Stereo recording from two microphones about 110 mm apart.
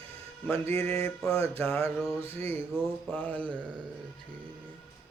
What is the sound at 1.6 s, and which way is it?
Mantra, 25° left (ahead or behind).